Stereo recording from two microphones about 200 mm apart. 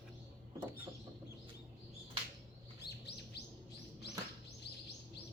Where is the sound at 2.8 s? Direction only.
55° left (ahead or behind).